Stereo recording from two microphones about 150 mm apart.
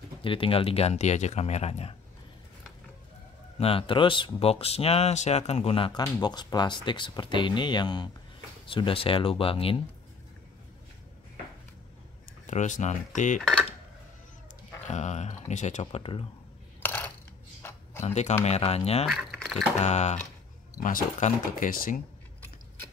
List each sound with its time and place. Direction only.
0.2 s speech: 35° left (ahead or behind)
3.5 s speech: 40° left (ahead or behind)
12.4 s speech: 55° left (ahead or behind)
13.4 s dishes: centre (ahead or behind)
14.9 s speech: 50° left (ahead or behind)
16.8 s coin: 15° left (ahead or behind)
17.6 s a sound: 15° left (ahead or behind)
18.0 s speech: 50° left (ahead or behind)
19.0 s speech: centre (ahead or behind)
19.8 s speech: 50° left (ahead or behind)
20.8 s speech: 65° left (ahead or behind)